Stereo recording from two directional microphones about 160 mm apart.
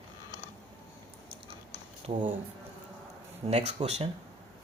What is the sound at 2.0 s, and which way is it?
Speech, 40° right (ahead or behind).